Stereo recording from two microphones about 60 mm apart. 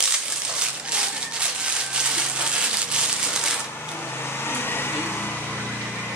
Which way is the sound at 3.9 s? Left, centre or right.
Left.